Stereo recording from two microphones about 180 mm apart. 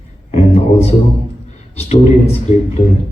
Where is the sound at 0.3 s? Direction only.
35° left (ahead or behind).